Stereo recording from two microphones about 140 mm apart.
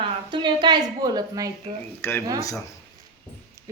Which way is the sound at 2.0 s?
15° left (ahead or behind).